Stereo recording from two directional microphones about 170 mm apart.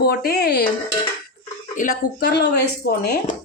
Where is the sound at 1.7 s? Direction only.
55° left (ahead or behind); by 3.2 s 70° left (ahead or behind).